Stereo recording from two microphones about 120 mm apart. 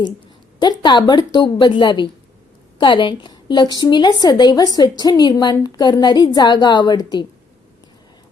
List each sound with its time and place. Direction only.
0.6 s a woman's voice: 35° left (ahead or behind)